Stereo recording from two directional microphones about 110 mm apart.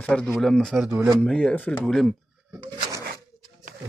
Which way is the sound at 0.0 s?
10° left (ahead or behind).